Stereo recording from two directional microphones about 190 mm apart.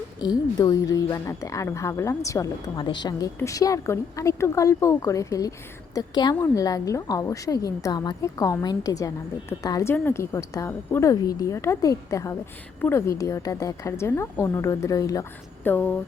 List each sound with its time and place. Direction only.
0.2 s a woman's voice: 20° left (ahead or behind)